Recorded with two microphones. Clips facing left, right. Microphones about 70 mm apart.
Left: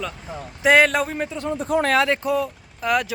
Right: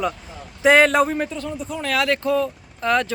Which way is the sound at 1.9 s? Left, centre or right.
Left.